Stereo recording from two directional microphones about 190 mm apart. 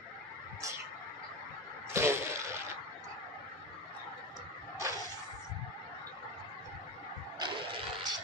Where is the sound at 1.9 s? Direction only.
15° right (ahead or behind).